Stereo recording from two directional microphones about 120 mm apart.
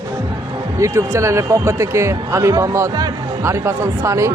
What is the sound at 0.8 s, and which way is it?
Speech, 25° right (ahead or behind).